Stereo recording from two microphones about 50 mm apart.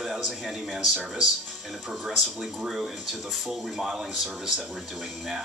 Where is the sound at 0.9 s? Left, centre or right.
Centre.